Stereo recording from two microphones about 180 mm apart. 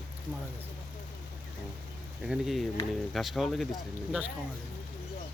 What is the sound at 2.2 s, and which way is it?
Speech, centre (ahead or behind).